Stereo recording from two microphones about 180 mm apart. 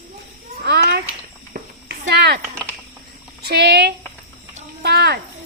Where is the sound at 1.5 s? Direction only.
45° right (ahead or behind).